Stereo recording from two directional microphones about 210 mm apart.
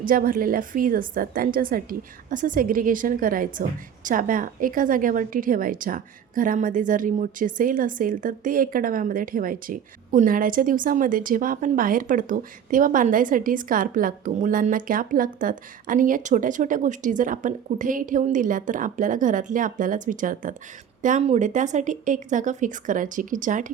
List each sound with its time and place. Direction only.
0.0 s a woman's voice: 40° right (ahead or behind)